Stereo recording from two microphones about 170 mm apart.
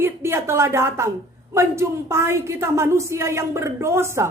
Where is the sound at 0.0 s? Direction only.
15° right (ahead or behind).